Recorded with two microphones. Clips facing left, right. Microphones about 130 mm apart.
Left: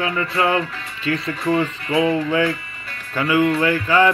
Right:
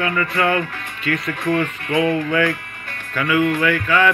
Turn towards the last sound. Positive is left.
turn(degrees=30)  # may be behind; listen again after turning